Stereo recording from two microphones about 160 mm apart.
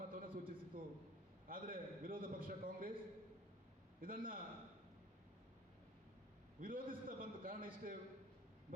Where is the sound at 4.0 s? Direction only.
60° right (ahead or behind).